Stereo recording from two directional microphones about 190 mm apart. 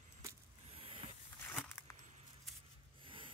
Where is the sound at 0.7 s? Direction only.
30° right (ahead or behind).